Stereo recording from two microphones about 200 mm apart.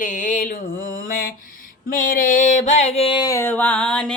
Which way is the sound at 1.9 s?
45° left (ahead or behind).